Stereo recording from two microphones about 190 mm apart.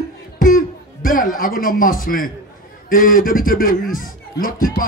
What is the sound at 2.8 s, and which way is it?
Speech, 45° left (ahead or behind).